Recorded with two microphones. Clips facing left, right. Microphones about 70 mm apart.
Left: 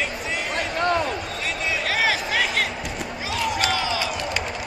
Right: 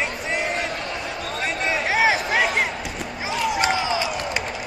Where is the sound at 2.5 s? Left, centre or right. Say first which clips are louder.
Right 1 dB; centre.